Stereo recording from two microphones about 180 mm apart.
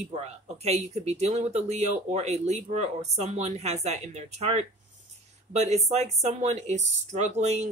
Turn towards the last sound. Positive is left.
turn(degrees=-40)  # may be behind; listen again after turning